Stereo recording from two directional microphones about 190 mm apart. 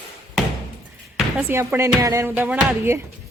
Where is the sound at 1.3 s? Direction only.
15° right (ahead or behind).